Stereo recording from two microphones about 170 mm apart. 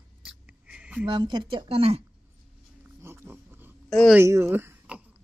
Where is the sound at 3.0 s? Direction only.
15° right (ahead or behind).